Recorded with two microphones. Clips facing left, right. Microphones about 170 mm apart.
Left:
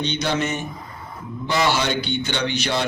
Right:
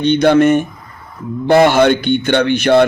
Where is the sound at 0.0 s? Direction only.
55° right (ahead or behind).